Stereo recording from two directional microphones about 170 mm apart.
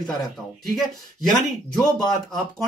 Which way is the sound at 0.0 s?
Centre (ahead or behind).